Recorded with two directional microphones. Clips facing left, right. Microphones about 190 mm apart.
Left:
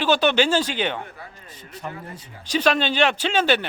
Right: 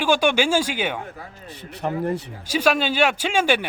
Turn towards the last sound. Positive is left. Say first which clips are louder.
# even
turn(degrees=-10)  # may be behind; listen again after turning